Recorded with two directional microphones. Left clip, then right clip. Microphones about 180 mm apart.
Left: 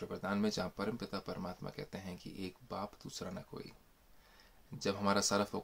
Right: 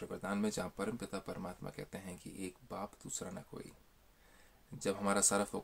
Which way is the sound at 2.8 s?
15° right (ahead or behind).